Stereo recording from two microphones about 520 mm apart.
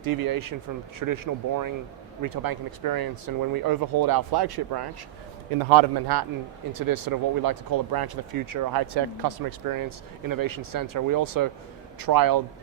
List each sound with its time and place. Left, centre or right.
0.0 s a man's voice: right